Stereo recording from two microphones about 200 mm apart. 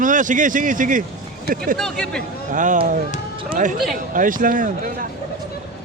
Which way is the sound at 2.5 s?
40° right (ahead or behind).